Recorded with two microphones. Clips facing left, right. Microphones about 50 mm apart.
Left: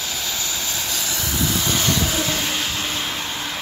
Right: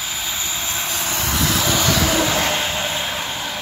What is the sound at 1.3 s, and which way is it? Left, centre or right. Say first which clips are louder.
Vehicle: right 3 dB; right.